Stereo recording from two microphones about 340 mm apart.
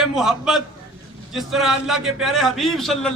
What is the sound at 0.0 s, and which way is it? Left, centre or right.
A man's voice, centre.